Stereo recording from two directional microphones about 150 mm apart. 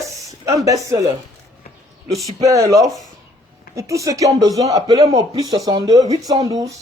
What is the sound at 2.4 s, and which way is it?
Speech, 20° right (ahead or behind).